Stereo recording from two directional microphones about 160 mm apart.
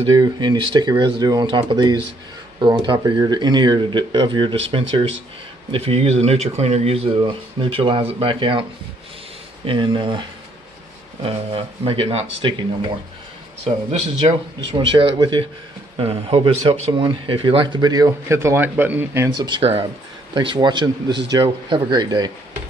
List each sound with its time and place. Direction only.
0.1 s speech: 25° right (ahead or behind)
9.7 s speech: 30° right (ahead or behind)
11.2 s speech: 35° right (ahead or behind)
14.2 s speech: 35° right (ahead or behind); by 19.3 s 15° right (ahead or behind)
19.3 s speech: 30° right (ahead or behind)